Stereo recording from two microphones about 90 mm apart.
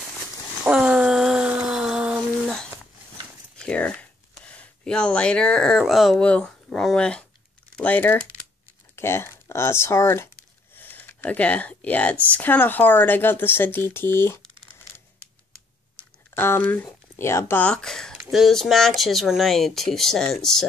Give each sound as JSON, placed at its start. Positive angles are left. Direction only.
{"t": 0.7, "sound": "a sound", "side_deg": -10}
{"t": 3.6, "sound": "speech", "side_deg": 15}
{"t": 6.1, "sound": "speech", "side_deg": 10}
{"t": 16.0, "sound": "a sound", "side_deg": 25}
{"t": 17.2, "sound": "speech", "side_deg": 30}
{"t": 17.6, "sound": "speech", "side_deg": 10}